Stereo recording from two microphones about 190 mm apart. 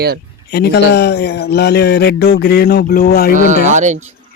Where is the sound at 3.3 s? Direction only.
40° right (ahead or behind).